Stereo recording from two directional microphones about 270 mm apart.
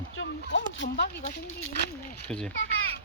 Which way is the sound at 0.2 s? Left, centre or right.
Left.